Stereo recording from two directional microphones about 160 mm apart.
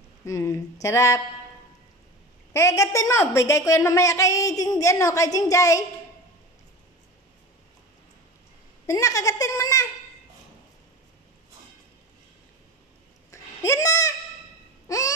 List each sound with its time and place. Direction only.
0.2 s speech: 20° left (ahead or behind)
2.5 s a woman's voice: 20° left (ahead or behind)
8.8 s a woman's voice: 20° left (ahead or behind)
13.3 s a sound: 20° left (ahead or behind)